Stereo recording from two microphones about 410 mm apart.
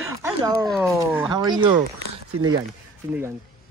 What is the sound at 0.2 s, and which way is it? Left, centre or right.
A child's voice, centre.